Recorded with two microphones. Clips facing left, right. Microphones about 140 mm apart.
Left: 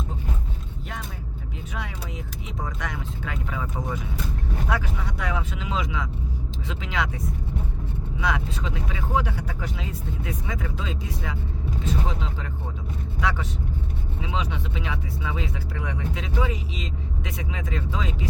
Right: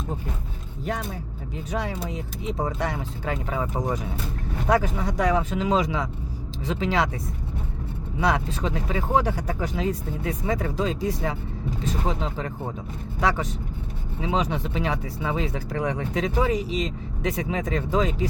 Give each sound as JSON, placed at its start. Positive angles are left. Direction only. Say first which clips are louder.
{"t": 1.7, "sound": "speech", "louder": "right 8 dB", "side_deg": -35}
{"t": 8.2, "sound": "speech", "louder": "right 4 dB", "side_deg": -40}